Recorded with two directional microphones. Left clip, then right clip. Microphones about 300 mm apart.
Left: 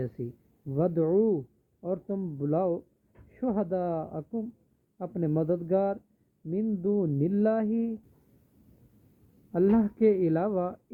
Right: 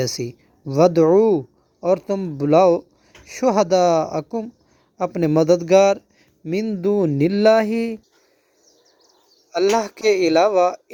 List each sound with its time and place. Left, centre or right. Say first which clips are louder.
0.7 s speech: right 13 dB; right
9.5 s speech: right 8 dB; right